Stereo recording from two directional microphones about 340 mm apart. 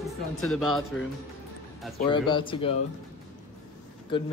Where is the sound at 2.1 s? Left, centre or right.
Centre.